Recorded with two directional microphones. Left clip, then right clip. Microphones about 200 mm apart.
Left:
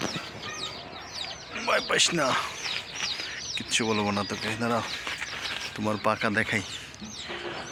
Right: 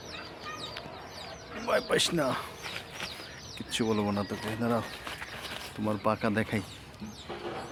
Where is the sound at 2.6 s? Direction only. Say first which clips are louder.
Left 7 dB; 65° right (ahead or behind).